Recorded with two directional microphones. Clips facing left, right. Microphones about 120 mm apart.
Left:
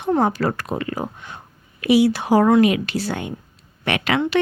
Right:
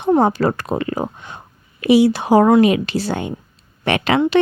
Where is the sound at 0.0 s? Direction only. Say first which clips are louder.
Right 4 dB; 25° right (ahead or behind).